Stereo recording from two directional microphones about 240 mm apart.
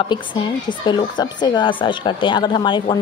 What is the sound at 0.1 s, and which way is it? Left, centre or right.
Speech, centre.